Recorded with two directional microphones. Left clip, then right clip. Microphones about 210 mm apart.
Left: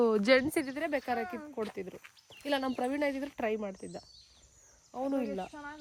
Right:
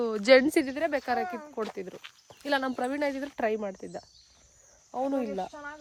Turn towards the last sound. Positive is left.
turn(degrees=-20)  # may be behind; listen again after turning